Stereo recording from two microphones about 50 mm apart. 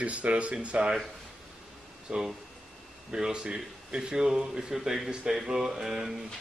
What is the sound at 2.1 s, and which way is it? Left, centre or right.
Speech, centre.